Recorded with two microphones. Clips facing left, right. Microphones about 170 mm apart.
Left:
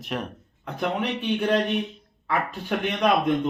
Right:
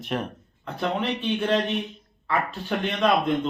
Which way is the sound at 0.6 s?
15° left (ahead or behind).